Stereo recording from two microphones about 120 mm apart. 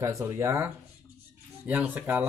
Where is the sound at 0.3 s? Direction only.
20° right (ahead or behind).